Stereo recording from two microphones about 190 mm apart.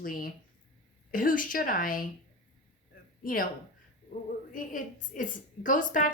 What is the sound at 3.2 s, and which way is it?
Speech, 45° left (ahead or behind).